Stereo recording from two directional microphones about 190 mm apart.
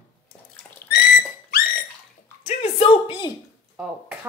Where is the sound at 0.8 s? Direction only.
55° left (ahead or behind).